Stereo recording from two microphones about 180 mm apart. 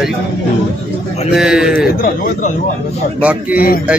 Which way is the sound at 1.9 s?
50° left (ahead or behind).